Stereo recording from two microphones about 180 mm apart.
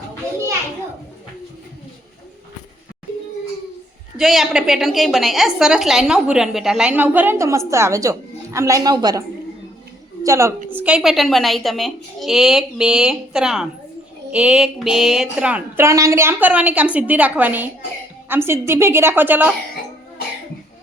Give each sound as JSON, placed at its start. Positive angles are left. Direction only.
{"t": 4.2, "sound": "a woman's voice", "side_deg": 0}
{"t": 10.2, "sound": "a woman's voice", "side_deg": -15}